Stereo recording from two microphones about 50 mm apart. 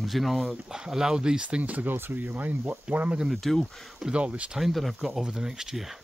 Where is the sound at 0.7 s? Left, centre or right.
Centre.